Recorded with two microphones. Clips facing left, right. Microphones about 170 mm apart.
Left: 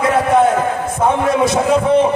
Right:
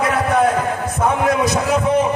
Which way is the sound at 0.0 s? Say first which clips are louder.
Left 3 dB; 25° left (ahead or behind).